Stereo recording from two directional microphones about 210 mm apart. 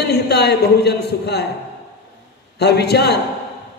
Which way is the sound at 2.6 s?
50° left (ahead or behind).